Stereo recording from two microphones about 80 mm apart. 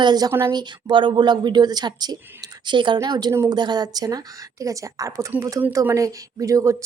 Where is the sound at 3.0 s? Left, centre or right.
Right.